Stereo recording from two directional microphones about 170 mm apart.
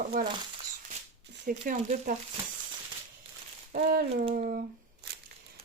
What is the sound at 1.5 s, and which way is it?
Speech, 55° right (ahead or behind).